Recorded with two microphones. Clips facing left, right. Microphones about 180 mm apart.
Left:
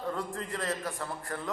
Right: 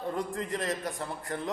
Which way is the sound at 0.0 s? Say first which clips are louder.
Right 2 dB; 20° right (ahead or behind).